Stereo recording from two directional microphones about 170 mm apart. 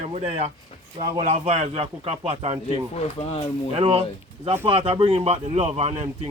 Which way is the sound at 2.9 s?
35° left (ahead or behind).